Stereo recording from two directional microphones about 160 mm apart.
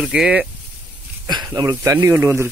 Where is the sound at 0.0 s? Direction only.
5° right (ahead or behind).